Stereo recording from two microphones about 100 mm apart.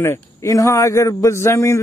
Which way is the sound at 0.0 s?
25° left (ahead or behind).